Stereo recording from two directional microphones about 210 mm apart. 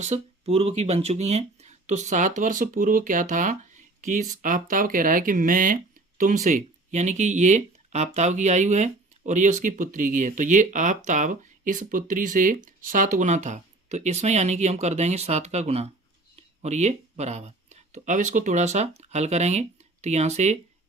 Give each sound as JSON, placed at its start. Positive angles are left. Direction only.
{"t": 0.0, "sound": "speech", "side_deg": -30}